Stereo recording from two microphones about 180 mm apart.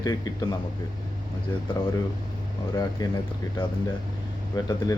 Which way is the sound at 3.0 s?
20° left (ahead or behind).